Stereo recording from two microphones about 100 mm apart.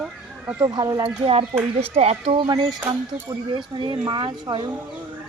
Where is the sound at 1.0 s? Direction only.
75° right (ahead or behind).